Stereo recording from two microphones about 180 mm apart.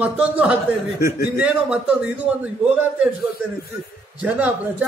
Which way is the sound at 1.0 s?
55° left (ahead or behind).